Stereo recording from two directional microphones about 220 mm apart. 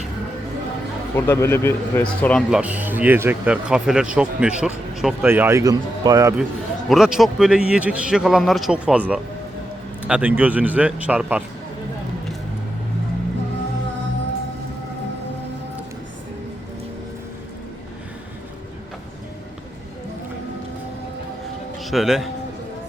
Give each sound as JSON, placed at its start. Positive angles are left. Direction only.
{"t": 1.1, "sound": "speech", "side_deg": 10}
{"t": 6.8, "sound": "a man's voice", "side_deg": 0}
{"t": 21.8, "sound": "speech", "side_deg": 0}